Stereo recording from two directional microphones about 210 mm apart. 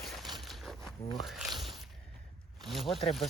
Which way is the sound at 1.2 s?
Centre (ahead or behind).